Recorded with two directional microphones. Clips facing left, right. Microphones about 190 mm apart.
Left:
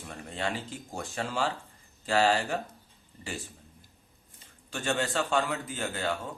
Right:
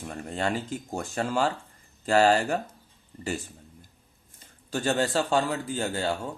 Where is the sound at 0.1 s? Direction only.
45° right (ahead or behind).